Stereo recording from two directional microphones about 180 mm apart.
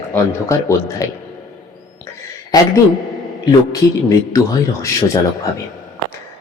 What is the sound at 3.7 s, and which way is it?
A man's voice, 20° left (ahead or behind).